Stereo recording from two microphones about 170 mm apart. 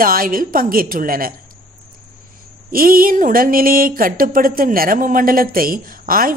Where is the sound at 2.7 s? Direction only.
55° right (ahead or behind).